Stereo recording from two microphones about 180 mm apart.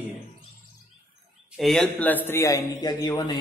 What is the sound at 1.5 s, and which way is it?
A man's voice, centre (ahead or behind).